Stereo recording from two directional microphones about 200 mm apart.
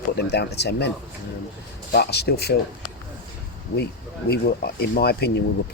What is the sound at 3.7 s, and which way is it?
Speech, 55° left (ahead or behind).